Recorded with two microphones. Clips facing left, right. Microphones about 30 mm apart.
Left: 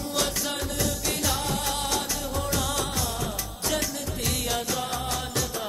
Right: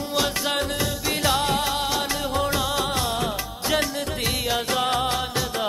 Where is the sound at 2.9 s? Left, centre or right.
Right.